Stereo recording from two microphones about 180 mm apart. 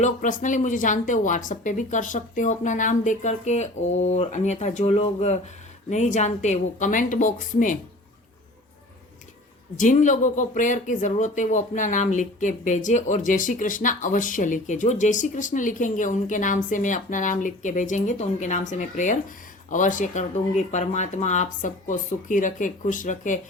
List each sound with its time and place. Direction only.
0.0 s speech: 45° left (ahead or behind)
9.7 s speech: 45° left (ahead or behind)